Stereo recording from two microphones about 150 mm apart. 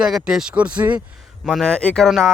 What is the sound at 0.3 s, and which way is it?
Speech, 5° right (ahead or behind).